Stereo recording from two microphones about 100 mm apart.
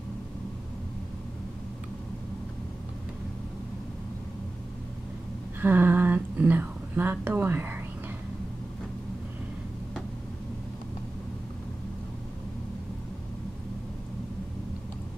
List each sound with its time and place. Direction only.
5.6 s a woman's voice: 20° right (ahead or behind)